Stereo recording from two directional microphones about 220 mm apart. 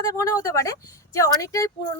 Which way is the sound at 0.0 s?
15° left (ahead or behind).